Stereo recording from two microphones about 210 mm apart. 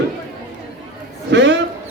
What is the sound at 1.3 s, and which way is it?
Speech, 55° right (ahead or behind).